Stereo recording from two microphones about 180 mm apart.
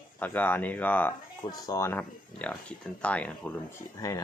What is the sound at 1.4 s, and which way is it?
Speech, 20° left (ahead or behind).